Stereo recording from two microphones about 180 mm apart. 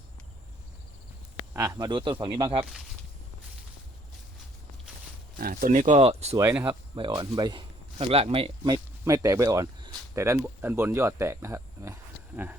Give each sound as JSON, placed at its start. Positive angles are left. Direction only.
{"t": 1.5, "sound": "speech", "side_deg": -20}
{"t": 5.4, "sound": "speech", "side_deg": -50}
{"t": 6.3, "sound": "speech", "side_deg": -10}
{"t": 6.9, "sound": "speech", "side_deg": -25}